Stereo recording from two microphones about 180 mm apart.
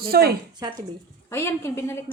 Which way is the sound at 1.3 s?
15° left (ahead or behind).